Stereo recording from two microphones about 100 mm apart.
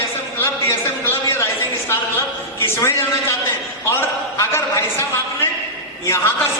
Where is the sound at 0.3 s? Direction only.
25° left (ahead or behind).